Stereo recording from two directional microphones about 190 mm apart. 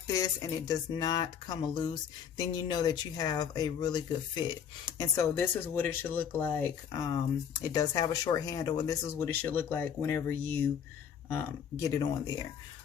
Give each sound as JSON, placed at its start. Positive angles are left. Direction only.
{"t": 0.1, "sound": "speech", "side_deg": 20}